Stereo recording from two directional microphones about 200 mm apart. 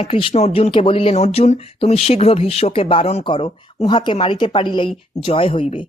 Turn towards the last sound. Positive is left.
turn(degrees=25)  # may be behind; listen again after turning